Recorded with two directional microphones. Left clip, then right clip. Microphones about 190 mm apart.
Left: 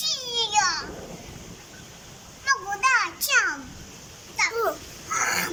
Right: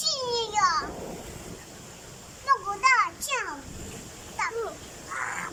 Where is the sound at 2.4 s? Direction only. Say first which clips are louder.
Even; centre (ahead or behind).